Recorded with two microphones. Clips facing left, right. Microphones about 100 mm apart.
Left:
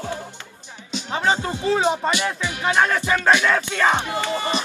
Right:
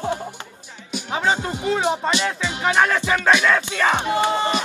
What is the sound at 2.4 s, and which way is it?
Music, 20° right (ahead or behind).